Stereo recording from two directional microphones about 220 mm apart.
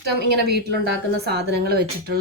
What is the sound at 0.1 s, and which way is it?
A woman's voice, 45° right (ahead or behind).